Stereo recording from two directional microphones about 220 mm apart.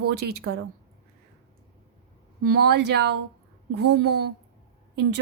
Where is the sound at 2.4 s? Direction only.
45° right (ahead or behind).